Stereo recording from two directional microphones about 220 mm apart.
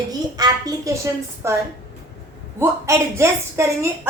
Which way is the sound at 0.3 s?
15° right (ahead or behind).